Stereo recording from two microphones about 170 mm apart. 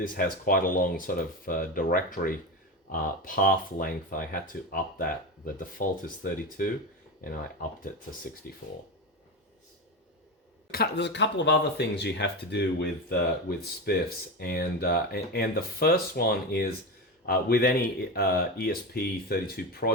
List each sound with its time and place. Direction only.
0.0 s speech: 55° left (ahead or behind)
10.7 s speech: 75° left (ahead or behind)